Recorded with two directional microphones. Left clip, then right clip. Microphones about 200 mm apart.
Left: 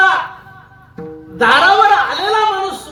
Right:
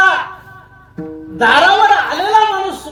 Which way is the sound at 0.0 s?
20° right (ahead or behind).